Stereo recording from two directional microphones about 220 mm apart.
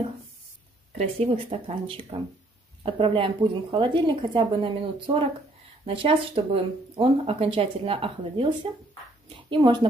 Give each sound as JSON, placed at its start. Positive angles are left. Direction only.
{"t": 0.9, "sound": "speech", "side_deg": -25}
{"t": 9.5, "sound": "speech", "side_deg": -20}